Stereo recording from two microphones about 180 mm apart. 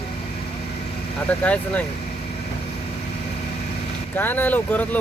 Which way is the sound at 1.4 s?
5° left (ahead or behind).